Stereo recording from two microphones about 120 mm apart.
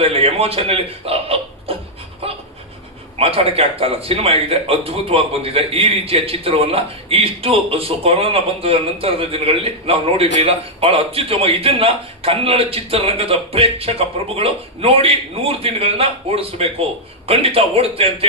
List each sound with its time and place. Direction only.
0.0 s a man's voice: 55° right (ahead or behind)
2.2 s dog: 55° right (ahead or behind)
3.2 s a man's voice: 55° right (ahead or behind)